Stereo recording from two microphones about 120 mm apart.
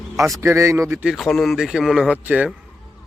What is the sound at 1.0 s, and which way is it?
A man's voice, 5° right (ahead or behind).